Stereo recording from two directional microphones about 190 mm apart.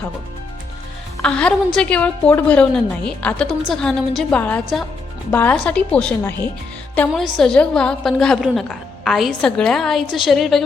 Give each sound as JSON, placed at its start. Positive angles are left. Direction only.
{"t": 1.2, "sound": "a woman's voice", "side_deg": 5}